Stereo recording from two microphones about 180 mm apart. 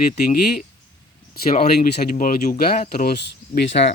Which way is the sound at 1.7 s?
50° left (ahead or behind).